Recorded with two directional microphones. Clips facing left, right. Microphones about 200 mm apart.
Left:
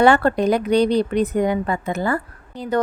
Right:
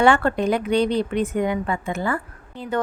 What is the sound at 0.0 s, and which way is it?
A woman's voice, 40° left (ahead or behind).